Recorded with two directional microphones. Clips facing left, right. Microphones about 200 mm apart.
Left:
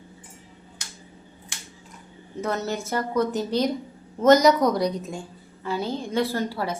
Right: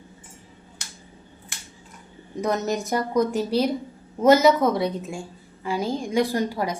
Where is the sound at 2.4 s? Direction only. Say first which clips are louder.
Right 3 dB; 15° right (ahead or behind).